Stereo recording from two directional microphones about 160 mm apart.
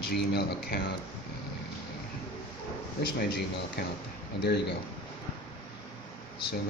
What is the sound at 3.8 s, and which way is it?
Speech, 90° left.